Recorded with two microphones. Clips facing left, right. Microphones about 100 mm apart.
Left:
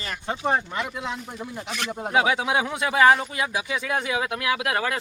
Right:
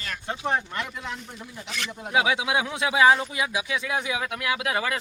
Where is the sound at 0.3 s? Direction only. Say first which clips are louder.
Left 3 dB; 15° left (ahead or behind).